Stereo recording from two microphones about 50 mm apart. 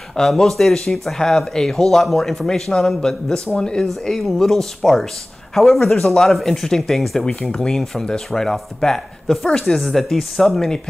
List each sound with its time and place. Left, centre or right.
0.1 s speech: centre
7.5 s speech: centre